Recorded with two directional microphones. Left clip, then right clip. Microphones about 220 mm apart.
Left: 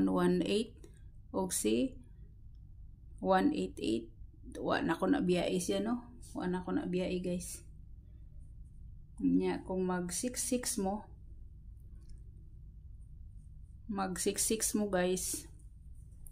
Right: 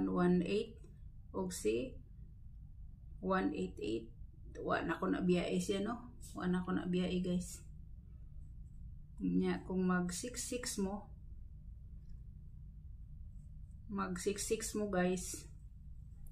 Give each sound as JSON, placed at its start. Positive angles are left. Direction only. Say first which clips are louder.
{"t": 0.0, "sound": "a sound", "louder": "left 4 dB", "side_deg": 50}
{"t": 1.3, "sound": "speech", "louder": "left 4 dB", "side_deg": 50}
{"t": 3.3, "sound": "speech", "louder": "left 7 dB", "side_deg": 50}
{"t": 9.4, "sound": "speech", "louder": "left 4 dB", "side_deg": 35}
{"t": 13.8, "sound": "speech", "louder": "left 4 dB", "side_deg": 45}